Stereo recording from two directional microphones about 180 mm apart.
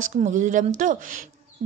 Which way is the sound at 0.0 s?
40° right (ahead or behind).